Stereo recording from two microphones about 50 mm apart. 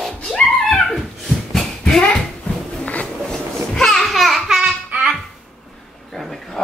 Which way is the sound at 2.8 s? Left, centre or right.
Left.